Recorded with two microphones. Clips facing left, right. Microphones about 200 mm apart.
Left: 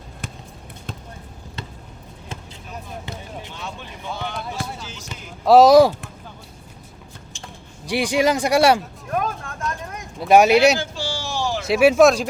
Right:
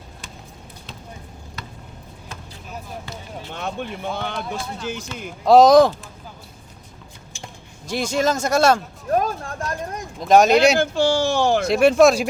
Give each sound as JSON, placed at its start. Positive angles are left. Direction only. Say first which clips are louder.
{"t": 3.5, "sound": "a sound", "louder": "right 6 dB", "side_deg": -55}
{"t": 4.2, "sound": "speech", "louder": "right 2 dB", "side_deg": -55}
{"t": 5.5, "sound": "speech", "louder": "even", "side_deg": 5}
{"t": 7.9, "sound": "speech", "louder": "left 2 dB", "side_deg": 15}
{"t": 9.0, "sound": "vehicle", "louder": "right 4 dB", "side_deg": -35}
{"t": 10.2, "sound": "speech", "louder": "left 1 dB", "side_deg": 10}
{"t": 10.8, "sound": "speech", "louder": "right 10 dB", "side_deg": -55}
{"t": 11.6, "sound": "speech", "louder": "left 2 dB", "side_deg": 5}